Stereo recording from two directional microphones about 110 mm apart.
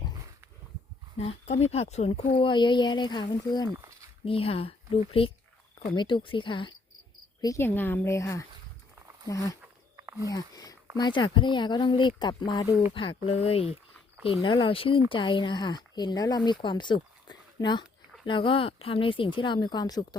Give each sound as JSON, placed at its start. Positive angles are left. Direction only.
{"t": 1.2, "sound": "speech", "side_deg": 65}
{"t": 4.3, "sound": "speech", "side_deg": 60}
{"t": 7.6, "sound": "a woman's voice", "side_deg": 20}
{"t": 9.6, "sound": "a sound", "side_deg": -15}
{"t": 10.2, "sound": "speech", "side_deg": 35}
{"t": 12.9, "sound": "speech", "side_deg": 55}
{"t": 14.4, "sound": "speech", "side_deg": 50}
{"t": 18.3, "sound": "speech", "side_deg": 50}